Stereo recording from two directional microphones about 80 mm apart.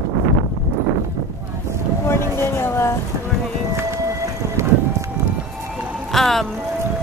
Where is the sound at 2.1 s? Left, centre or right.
Left.